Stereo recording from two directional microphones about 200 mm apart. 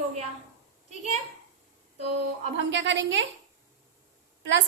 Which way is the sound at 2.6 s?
65° right (ahead or behind).